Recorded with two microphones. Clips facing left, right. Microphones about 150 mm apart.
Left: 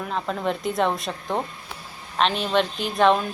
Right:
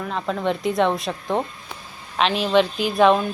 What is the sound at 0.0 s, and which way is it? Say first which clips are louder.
Speech: right 2 dB; centre (ahead or behind).